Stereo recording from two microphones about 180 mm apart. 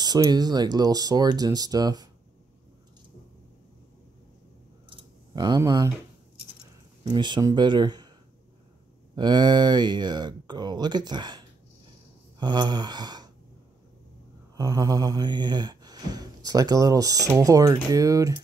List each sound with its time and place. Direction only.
0.0 s mantra: 20° right (ahead or behind)
4.8 s a sound: 25° right (ahead or behind)
7.1 s mantra: 25° right (ahead or behind)
9.1 s mantra: 25° right (ahead or behind)
14.6 s mantra: 20° right (ahead or behind)